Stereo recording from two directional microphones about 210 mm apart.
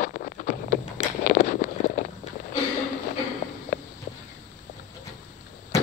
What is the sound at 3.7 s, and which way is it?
Walk, 45° left (ahead or behind).